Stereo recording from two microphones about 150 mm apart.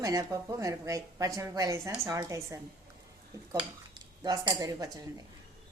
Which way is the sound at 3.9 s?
30° right (ahead or behind).